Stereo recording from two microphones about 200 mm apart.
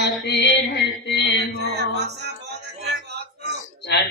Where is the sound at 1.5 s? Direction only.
55° right (ahead or behind).